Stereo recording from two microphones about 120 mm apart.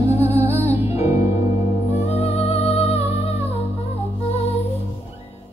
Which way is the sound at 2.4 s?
55° left (ahead or behind).